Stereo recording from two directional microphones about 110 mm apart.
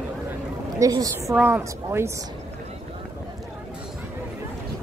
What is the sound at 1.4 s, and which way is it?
Speech, 20° right (ahead or behind).